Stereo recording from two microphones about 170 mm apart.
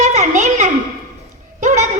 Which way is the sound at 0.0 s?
45° right (ahead or behind).